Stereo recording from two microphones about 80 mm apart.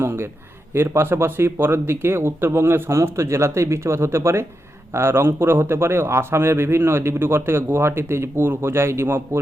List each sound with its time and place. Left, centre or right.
0.0 s a man's voice: right